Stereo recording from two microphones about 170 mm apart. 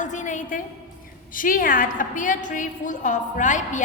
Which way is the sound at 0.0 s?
45° left (ahead or behind).